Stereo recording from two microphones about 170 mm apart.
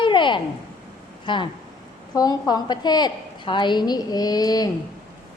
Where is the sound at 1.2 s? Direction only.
30° left (ahead or behind).